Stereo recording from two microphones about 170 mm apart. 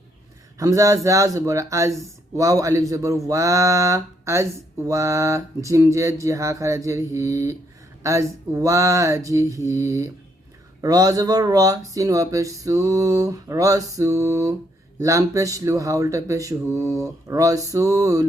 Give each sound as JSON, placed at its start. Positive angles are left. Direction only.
{"t": 0.6, "sound": "speech", "side_deg": -20}